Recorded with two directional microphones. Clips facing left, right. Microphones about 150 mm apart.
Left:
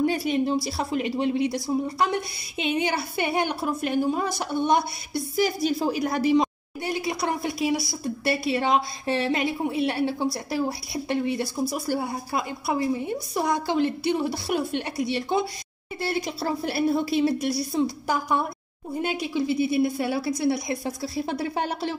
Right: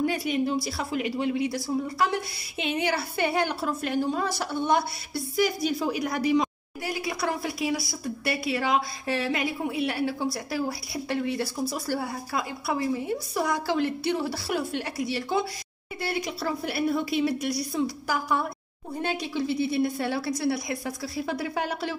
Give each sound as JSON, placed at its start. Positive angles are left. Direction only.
{"t": 0.0, "sound": "a woman's voice", "side_deg": 30}
{"t": 5.3, "sound": "a woman's voice", "side_deg": 30}